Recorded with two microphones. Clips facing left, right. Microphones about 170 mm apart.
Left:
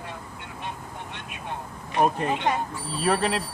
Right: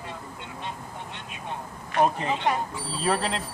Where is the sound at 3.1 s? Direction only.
15° left (ahead or behind).